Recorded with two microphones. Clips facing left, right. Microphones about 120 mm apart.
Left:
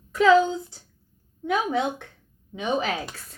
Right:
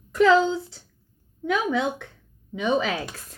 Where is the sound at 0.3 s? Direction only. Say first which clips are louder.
Left 2 dB; 70° right (ahead or behind).